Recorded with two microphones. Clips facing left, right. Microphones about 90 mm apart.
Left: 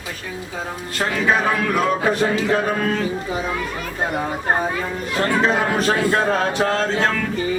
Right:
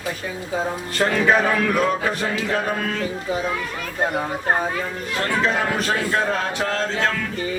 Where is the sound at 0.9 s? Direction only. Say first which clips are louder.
Right 1 dB; 5° left (ahead or behind).